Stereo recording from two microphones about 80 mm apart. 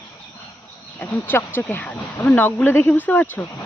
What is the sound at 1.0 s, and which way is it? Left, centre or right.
Speech, left.